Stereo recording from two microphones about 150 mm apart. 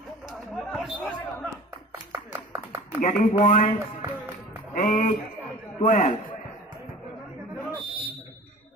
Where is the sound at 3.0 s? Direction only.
55° left (ahead or behind).